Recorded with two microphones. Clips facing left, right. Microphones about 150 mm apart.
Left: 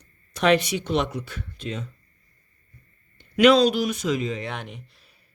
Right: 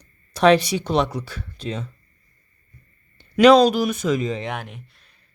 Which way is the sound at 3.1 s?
40° right (ahead or behind).